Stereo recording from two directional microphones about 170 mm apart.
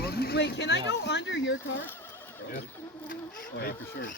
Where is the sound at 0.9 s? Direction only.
90° left.